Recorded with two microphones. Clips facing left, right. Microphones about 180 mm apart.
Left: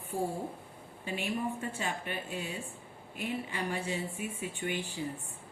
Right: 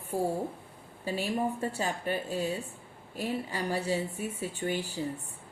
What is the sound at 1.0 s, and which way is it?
Speech, 35° right (ahead or behind).